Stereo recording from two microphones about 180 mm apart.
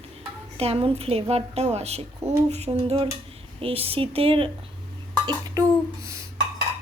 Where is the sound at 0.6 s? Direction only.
35° right (ahead or behind).